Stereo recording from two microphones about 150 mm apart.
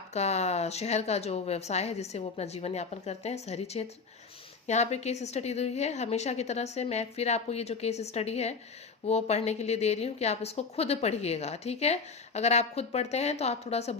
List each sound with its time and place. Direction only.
0.1 s a woman's voice: 45° left (ahead or behind)